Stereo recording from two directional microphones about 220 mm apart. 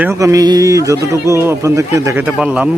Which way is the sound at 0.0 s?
15° right (ahead or behind).